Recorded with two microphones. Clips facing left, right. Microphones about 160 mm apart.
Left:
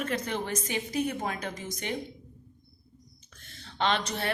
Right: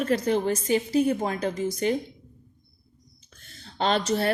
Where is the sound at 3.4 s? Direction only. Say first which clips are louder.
Right 3 dB; 35° right (ahead or behind).